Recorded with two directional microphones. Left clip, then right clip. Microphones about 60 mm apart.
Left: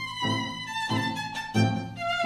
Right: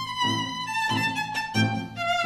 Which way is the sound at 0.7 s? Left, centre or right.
Left.